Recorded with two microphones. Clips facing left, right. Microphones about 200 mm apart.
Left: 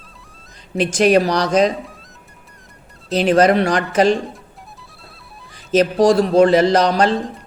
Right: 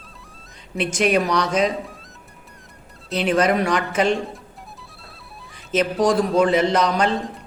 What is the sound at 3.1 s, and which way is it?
Speech, 35° left (ahead or behind).